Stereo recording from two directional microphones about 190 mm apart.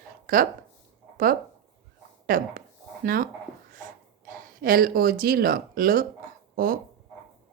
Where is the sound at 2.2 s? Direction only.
50° right (ahead or behind).